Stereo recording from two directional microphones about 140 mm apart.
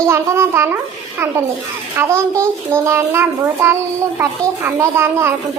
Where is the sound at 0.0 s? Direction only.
20° right (ahead or behind).